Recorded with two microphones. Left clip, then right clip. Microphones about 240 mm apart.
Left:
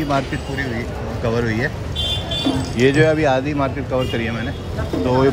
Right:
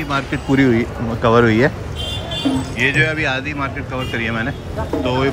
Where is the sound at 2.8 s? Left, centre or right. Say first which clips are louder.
Left 2 dB; centre.